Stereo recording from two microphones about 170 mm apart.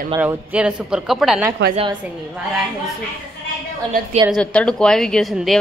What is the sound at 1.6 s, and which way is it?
Speech, 90° right.